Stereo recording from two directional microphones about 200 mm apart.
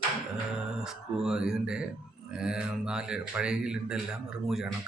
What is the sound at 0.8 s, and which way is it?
A man's voice, 5° right (ahead or behind).